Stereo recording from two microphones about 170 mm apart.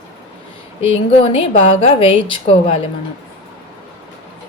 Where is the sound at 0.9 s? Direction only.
35° left (ahead or behind).